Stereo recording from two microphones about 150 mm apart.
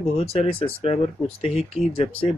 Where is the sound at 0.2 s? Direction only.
40° left (ahead or behind).